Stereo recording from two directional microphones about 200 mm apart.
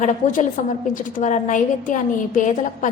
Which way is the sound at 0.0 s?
40° left (ahead or behind).